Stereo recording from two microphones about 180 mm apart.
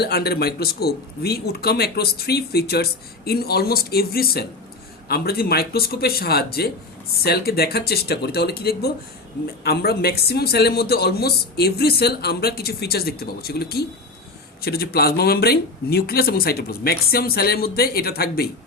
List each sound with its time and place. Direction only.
0.0 s speech: 60° left (ahead or behind)